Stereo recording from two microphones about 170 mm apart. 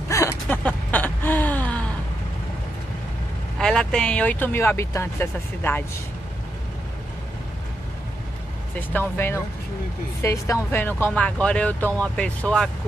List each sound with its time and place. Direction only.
0.1 s a sound: 15° left (ahead or behind)
3.5 s speech: 5° left (ahead or behind)
8.7 s speech: 10° left (ahead or behind)